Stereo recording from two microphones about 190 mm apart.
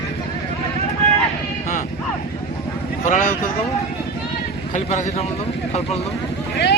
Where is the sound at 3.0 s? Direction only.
40° left (ahead or behind).